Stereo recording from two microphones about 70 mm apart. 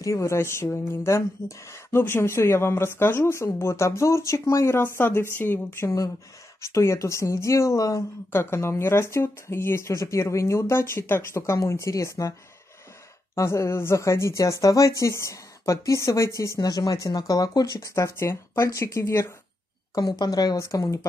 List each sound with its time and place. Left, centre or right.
0.0 s speech: left
6.6 s speech: left
8.3 s speech: left
16.5 s speech: left
17.7 s speech: left
19.9 s speech: left
20.5 s speech: left